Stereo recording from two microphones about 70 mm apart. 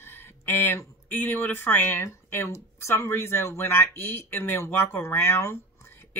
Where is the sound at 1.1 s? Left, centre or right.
Left.